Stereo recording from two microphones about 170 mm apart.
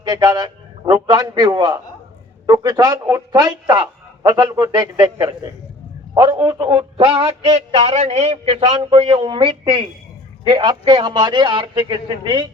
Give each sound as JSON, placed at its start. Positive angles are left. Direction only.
{"t": 0.0, "sound": "a man's voice", "side_deg": -20}